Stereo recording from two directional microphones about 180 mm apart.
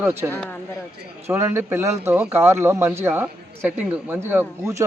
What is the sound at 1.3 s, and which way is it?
A man's voice, 15° right (ahead or behind).